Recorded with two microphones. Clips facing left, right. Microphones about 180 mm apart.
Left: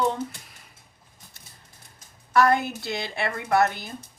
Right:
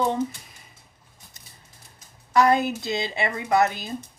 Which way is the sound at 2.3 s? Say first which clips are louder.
Right 1 dB; 20° right (ahead or behind).